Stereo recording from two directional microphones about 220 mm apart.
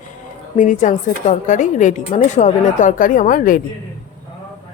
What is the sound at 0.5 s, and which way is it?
Speech, 35° left (ahead or behind).